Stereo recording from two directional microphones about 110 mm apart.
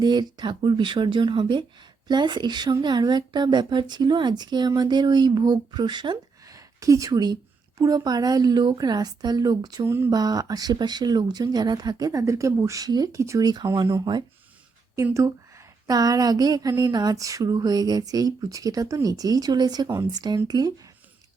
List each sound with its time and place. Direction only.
0.0 s speech: 40° right (ahead or behind)
9.8 s speech: 20° right (ahead or behind)
10.1 s speech: 35° right (ahead or behind)
15.1 s speech: 30° right (ahead or behind)